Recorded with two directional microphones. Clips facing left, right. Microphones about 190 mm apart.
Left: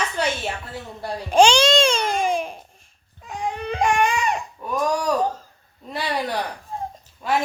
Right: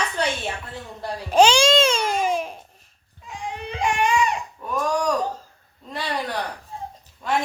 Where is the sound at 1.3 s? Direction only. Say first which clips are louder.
Even; 5° right (ahead or behind).